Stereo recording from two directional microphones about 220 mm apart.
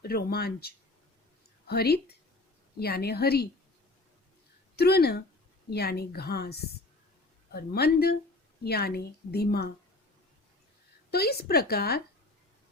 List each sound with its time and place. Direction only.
0.0 s a woman's voice: 45° left (ahead or behind)
4.8 s a woman's voice: 45° left (ahead or behind)
11.1 s a woman's voice: 45° left (ahead or behind)